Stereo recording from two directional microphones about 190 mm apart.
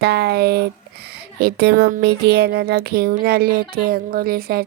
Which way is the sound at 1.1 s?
55° right (ahead or behind).